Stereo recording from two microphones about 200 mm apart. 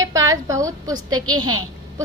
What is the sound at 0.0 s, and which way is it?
A woman's voice, 15° right (ahead or behind).